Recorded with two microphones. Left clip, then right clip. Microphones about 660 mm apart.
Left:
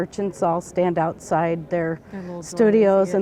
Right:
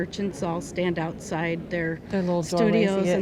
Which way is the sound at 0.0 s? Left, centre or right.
Left.